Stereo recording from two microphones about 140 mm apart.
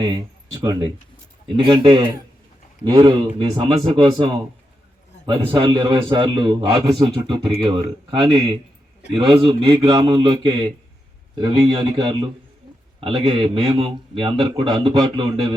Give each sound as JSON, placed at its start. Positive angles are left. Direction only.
{"t": 0.0, "sound": "speech", "side_deg": -25}
{"t": 1.5, "sound": "a man's voice", "side_deg": -35}
{"t": 9.3, "sound": "a man's voice", "side_deg": -40}
{"t": 13.0, "sound": "a man's voice", "side_deg": -40}